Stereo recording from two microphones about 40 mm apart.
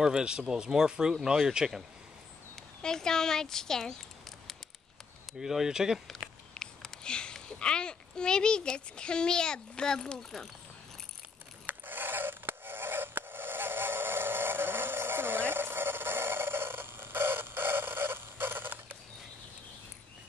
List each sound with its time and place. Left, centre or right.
0.0 s speech: centre
2.8 s speech: centre
5.4 s speech: centre
6.5 s a child's voice: left
11.6 s a sound: right